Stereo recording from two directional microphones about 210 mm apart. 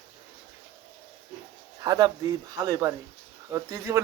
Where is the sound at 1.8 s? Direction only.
15° right (ahead or behind).